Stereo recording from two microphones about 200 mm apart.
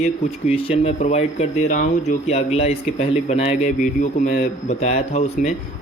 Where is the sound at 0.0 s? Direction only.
30° left (ahead or behind).